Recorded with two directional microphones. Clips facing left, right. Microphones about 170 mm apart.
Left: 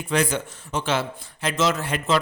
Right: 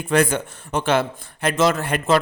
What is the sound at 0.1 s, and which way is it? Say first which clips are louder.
A man's voice: right 4 dB; 55° right (ahead or behind).